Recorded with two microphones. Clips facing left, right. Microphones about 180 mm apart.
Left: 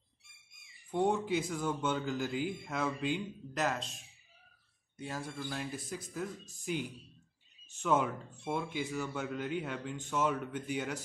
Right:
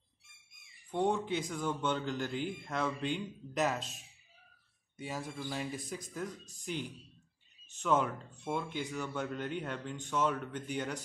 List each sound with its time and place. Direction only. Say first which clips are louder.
0.9 s speech: left 1 dB; 10° left (ahead or behind)
4.9 s speech: even; centre (ahead or behind)